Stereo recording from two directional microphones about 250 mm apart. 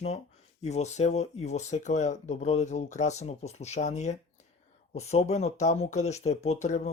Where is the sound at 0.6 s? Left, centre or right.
Left.